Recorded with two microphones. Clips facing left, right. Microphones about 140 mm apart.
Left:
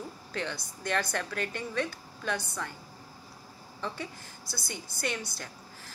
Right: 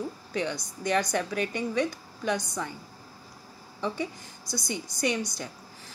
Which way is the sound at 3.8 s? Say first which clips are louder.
Right 6 dB; 15° right (ahead or behind).